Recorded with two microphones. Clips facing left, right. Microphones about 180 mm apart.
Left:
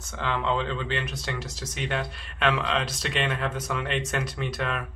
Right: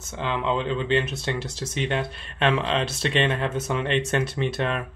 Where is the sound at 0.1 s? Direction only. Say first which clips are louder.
Right 2 dB; 20° right (ahead or behind).